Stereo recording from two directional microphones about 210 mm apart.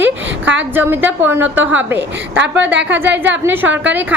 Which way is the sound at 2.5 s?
60° right (ahead or behind).